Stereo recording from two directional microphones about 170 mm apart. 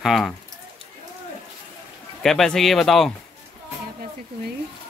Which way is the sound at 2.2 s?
Centre (ahead or behind).